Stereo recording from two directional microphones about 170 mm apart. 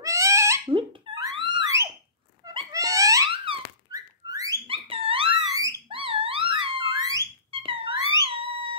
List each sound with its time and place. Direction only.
0.0 s cat: 20° right (ahead or behind)
0.7 s a sound: 30° right (ahead or behind)
2.7 s wail: 20° right (ahead or behind)
3.3 s wail: 30° right (ahead or behind)
3.9 s whistling: 20° right (ahead or behind)
4.6 s wail: 30° right (ahead or behind)